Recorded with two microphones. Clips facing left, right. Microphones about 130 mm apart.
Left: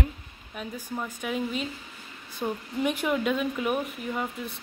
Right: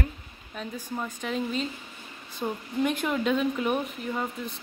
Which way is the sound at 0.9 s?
5° left (ahead or behind).